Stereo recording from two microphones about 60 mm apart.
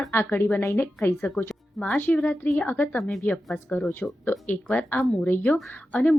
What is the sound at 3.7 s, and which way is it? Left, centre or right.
Speech, left.